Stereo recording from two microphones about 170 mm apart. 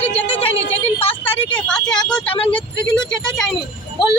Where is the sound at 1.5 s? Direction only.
5° left (ahead or behind).